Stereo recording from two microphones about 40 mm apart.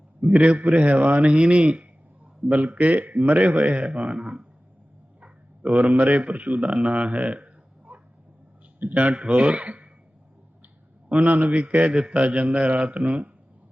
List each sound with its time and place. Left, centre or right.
0.2 s a man's voice: right
1.3 s a man's voice: right
5.2 s a man's voice: right
6.7 s a sound: right
8.9 s a man's voice: right
11.1 s a man's voice: right